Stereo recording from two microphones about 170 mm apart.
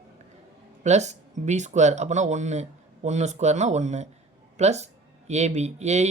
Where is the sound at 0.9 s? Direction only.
40° right (ahead or behind).